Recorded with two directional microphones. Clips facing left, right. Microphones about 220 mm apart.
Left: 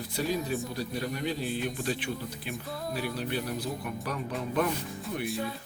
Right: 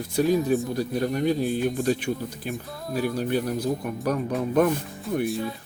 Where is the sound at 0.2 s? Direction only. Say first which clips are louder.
Right 9 dB; 50° right (ahead or behind).